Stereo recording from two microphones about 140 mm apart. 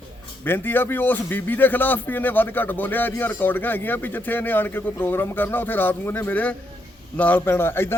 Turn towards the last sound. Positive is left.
turn(degrees=15)  # may be behind; listen again after turning